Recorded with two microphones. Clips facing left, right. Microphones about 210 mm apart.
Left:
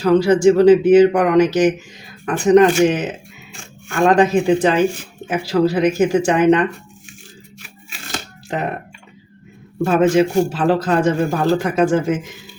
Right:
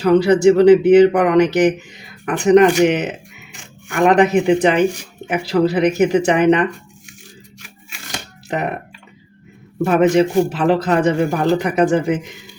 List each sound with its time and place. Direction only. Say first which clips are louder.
0.3 s speech: right 1 dB; 20° right (ahead or behind)
9.8 s a man's voice: right 1 dB; 20° right (ahead or behind)